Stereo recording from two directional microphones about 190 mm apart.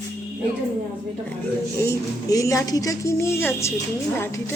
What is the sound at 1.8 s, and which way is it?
Speech, 15° left (ahead or behind).